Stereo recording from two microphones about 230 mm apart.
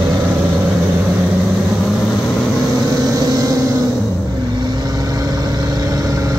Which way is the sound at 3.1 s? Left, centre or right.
Centre.